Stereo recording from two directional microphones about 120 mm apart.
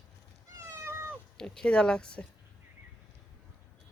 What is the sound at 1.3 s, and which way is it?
Speech, 5° left (ahead or behind).